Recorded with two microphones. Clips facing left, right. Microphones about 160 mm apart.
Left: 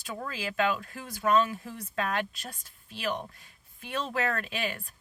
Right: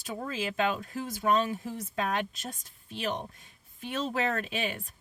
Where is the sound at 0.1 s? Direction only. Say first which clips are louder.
Right 2 dB; 20° right (ahead or behind).